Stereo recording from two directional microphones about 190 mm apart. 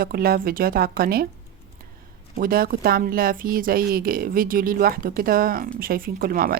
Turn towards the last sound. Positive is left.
turn(degrees=-50)  # may be behind; listen again after turning